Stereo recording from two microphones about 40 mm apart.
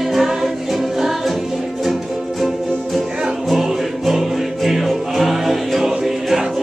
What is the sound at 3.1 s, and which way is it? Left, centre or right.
Music, centre.